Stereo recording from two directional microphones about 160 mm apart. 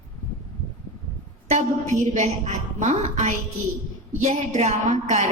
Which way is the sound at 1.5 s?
45° right (ahead or behind).